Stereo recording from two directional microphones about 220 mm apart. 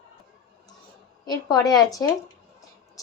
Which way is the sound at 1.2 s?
15° left (ahead or behind).